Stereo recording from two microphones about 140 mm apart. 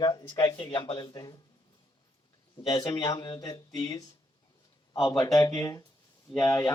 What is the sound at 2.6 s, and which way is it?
Speech, 25° left (ahead or behind).